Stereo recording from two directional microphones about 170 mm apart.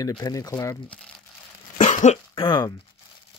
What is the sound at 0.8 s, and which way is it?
Speech, 5° left (ahead or behind).